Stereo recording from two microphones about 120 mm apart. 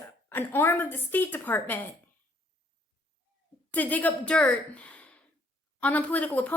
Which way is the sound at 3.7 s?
15° left (ahead or behind).